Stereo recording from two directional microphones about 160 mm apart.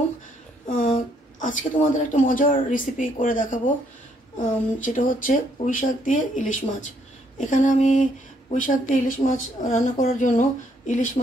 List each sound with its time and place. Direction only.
0.7 s a woman's voice: 50° left (ahead or behind)